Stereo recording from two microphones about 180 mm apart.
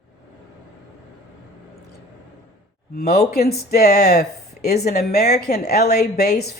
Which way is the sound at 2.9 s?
60° left (ahead or behind).